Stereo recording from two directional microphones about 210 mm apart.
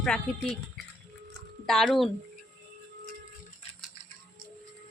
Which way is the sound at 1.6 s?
Centre (ahead or behind).